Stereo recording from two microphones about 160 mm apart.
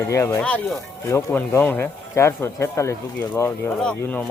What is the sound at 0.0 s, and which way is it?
Speech, 15° left (ahead or behind).